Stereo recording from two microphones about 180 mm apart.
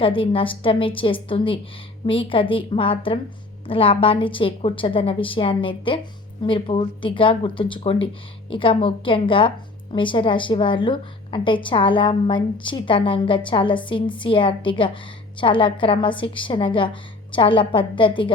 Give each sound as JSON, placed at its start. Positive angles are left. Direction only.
{"t": 0.0, "sound": "a woman's voice", "side_deg": 30}